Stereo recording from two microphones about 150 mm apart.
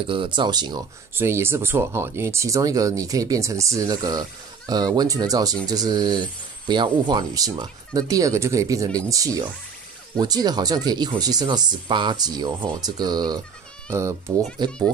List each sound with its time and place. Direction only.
0.0 s speech: 35° right (ahead or behind)
1.1 s speech: 15° right (ahead or behind)